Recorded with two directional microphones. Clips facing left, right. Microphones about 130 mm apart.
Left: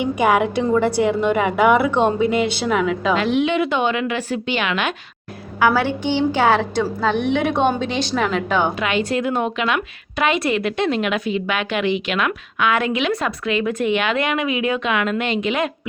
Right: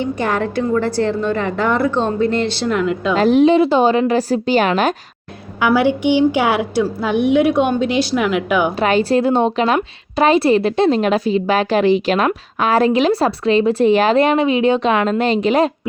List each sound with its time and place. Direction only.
0.0 s speech: 10° left (ahead or behind)
3.2 s a woman's voice: 40° right (ahead or behind)
5.6 s a woman's voice: 15° right (ahead or behind)
8.8 s a woman's voice: 35° right (ahead or behind)